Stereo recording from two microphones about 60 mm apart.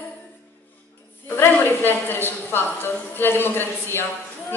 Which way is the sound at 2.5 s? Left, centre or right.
Left.